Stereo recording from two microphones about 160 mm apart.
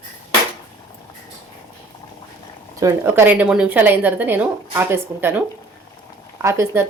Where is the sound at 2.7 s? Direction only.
15° right (ahead or behind).